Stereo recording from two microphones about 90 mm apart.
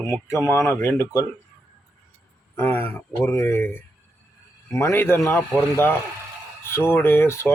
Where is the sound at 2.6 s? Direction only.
25° left (ahead or behind).